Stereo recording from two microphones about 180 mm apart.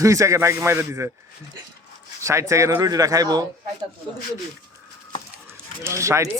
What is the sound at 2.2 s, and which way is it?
Speech, 15° right (ahead or behind).